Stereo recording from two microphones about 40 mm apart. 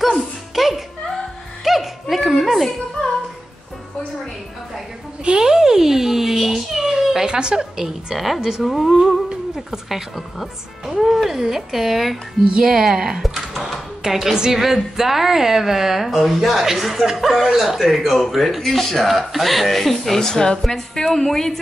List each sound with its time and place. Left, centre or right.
0.6 s music: centre
5.2 s a sound: right
7.3 s a woman's voice: centre
7.8 s a woman's voice: centre
8.6 s a woman's voice: centre
12.5 s a woman's voice: centre
13.2 s typing: centre
14.0 s a woman's voice: centre